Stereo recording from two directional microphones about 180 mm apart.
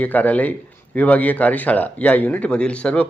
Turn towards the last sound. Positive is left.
turn(degrees=5)  # may be behind; listen again after turning